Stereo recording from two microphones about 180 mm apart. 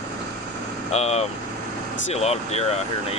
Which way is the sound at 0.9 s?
35° left (ahead or behind).